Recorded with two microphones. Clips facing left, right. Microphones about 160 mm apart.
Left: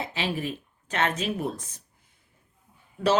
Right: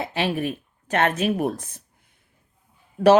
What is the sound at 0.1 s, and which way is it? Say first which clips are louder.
Speech: right 5 dB; 55° right (ahead or behind).